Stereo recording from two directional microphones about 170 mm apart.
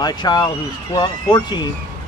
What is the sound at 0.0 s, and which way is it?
Speech, 25° left (ahead or behind).